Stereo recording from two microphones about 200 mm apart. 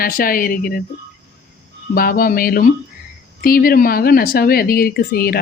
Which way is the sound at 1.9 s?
45° left (ahead or behind).